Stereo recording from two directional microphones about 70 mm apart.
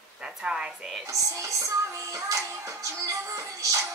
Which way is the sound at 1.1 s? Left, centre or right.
Right.